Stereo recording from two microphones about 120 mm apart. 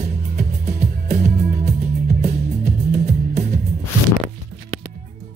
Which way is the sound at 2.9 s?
70° right (ahead or behind).